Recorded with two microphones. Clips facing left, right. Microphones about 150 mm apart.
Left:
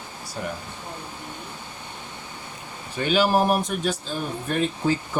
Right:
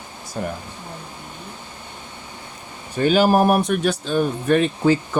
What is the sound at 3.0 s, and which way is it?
Speech, 45° right (ahead or behind).